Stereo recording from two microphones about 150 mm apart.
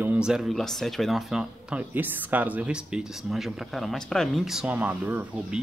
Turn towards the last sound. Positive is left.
turn(degrees=-10)  # may be behind; listen again after turning